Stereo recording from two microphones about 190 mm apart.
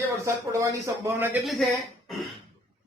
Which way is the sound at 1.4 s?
Centre (ahead or behind).